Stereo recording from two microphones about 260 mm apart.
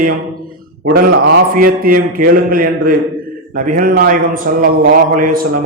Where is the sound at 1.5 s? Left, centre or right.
Right.